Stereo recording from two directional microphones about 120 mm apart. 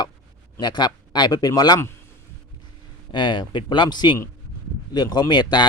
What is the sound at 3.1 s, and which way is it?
Speech, 40° left (ahead or behind).